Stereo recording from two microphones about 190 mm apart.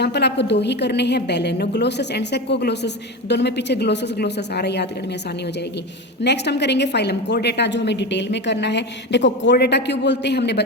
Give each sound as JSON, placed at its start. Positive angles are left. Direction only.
{"t": 0.0, "sound": "a woman's voice", "side_deg": 60}
{"t": 6.2, "sound": "a woman's voice", "side_deg": 65}